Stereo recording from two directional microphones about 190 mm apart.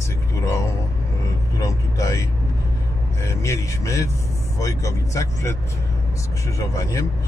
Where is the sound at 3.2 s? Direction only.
15° left (ahead or behind).